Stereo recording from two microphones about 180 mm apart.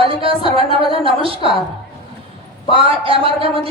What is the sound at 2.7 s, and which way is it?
Speech, 30° right (ahead or behind).